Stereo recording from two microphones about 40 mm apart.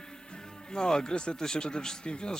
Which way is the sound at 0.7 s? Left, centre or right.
Centre.